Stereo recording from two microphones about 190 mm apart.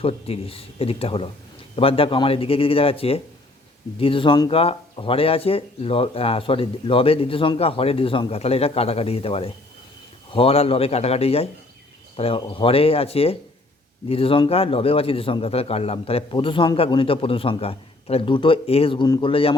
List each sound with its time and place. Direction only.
0.0 s speech: 30° left (ahead or behind)